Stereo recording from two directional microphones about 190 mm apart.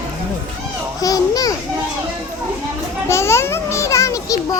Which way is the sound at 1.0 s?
20° left (ahead or behind).